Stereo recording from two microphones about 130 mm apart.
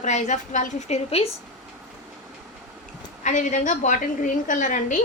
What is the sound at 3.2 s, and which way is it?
A woman's voice, 75° left (ahead or behind).